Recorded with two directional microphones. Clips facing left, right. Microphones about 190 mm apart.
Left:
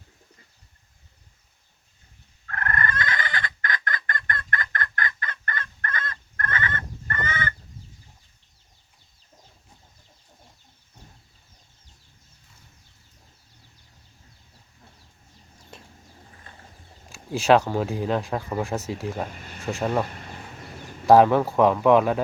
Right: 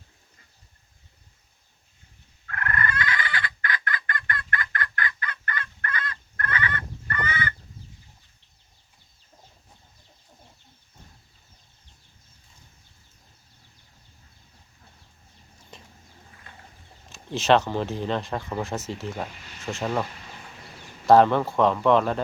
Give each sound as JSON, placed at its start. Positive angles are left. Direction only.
{"t": 2.5, "sound": "fowl", "side_deg": 45}
{"t": 16.3, "sound": "a sound", "side_deg": 35}
{"t": 17.1, "sound": "speech", "side_deg": 10}
{"t": 19.3, "sound": "speech", "side_deg": 50}
{"t": 19.6, "sound": "speech", "side_deg": 0}
{"t": 21.1, "sound": "speech", "side_deg": 10}